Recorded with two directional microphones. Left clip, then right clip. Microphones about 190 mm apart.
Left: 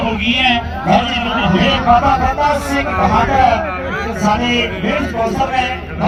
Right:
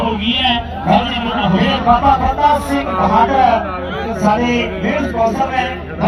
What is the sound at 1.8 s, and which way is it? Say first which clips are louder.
Speech: right 1 dB; 65° left (ahead or behind).